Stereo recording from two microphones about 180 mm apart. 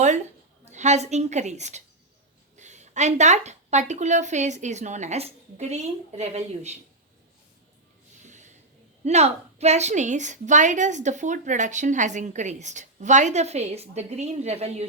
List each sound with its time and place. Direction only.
0.7 s a woman's voice: 40° right (ahead or behind)
8.3 s a sound: 40° right (ahead or behind)
9.0 s a woman's voice: 35° right (ahead or behind)